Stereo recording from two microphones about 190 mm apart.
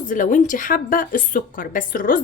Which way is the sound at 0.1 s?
45° left (ahead or behind).